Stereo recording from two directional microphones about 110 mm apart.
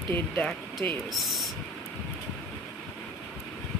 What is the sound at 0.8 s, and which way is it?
Speech, 15° left (ahead or behind).